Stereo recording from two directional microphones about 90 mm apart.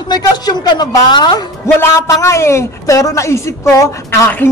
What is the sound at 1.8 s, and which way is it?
Speech, 30° left (ahead or behind).